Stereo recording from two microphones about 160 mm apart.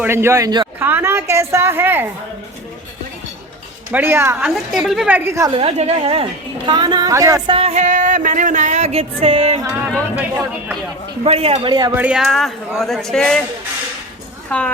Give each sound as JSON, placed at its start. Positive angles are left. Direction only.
{"t": 0.0, "sound": "speech", "side_deg": -15}
{"t": 0.8, "sound": "a woman's voice", "side_deg": -15}
{"t": 3.9, "sound": "a woman's voice", "side_deg": -15}
{"t": 4.4, "sound": "a woman's voice", "side_deg": 0}
{"t": 5.5, "sound": "a woman's voice", "side_deg": -35}
{"t": 6.7, "sound": "speech", "side_deg": -25}
{"t": 7.5, "sound": "a sound", "side_deg": -40}
{"t": 10.2, "sound": "a woman's voice", "side_deg": -10}
{"t": 11.2, "sound": "a woman's voice", "side_deg": -40}
{"t": 11.9, "sound": "a man's voice", "side_deg": -5}
{"t": 14.5, "sound": "a woman's voice", "side_deg": 10}